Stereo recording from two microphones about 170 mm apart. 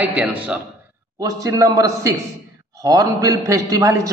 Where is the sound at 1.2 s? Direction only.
20° right (ahead or behind).